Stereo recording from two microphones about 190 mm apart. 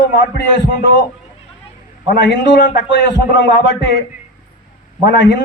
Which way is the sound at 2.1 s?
65° left (ahead or behind).